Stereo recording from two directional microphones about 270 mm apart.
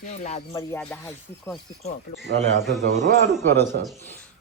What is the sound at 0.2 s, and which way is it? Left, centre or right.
Music, left.